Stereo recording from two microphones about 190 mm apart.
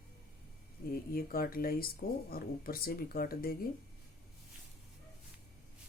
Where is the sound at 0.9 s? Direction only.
50° left (ahead or behind).